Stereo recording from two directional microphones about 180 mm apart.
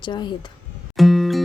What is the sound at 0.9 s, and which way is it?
Music, centre (ahead or behind).